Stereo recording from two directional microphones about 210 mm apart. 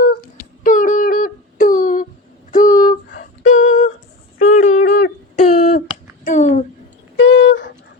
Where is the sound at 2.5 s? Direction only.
40° left (ahead or behind).